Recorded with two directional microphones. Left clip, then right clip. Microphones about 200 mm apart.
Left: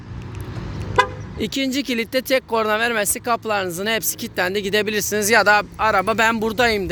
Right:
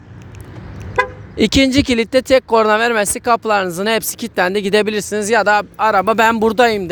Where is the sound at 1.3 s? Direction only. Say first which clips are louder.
Right 10 dB; 45° right (ahead or behind).